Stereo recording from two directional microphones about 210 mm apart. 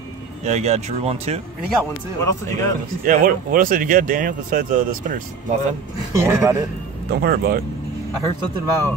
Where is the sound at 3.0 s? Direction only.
40° right (ahead or behind).